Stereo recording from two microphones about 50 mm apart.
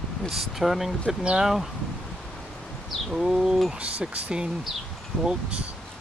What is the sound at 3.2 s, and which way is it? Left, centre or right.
Speech, centre.